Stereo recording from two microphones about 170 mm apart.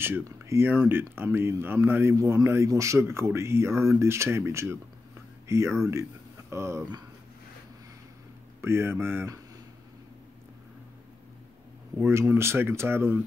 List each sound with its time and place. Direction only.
0.0 s speech: 15° right (ahead or behind)
8.5 s speech: 15° right (ahead or behind)
12.0 s speech: 15° right (ahead or behind)